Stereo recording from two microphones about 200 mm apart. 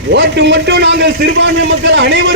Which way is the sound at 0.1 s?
60° right (ahead or behind).